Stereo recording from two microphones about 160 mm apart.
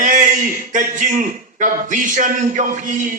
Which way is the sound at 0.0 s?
55° right (ahead or behind).